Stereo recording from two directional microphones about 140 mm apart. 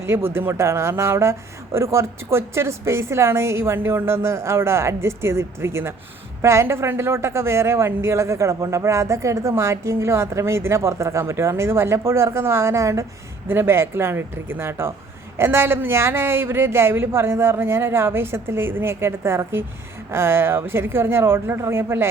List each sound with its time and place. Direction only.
0.0 s speech: 15° right (ahead or behind)